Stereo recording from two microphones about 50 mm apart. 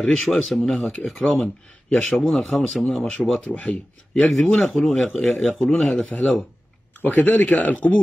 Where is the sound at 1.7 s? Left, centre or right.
Left.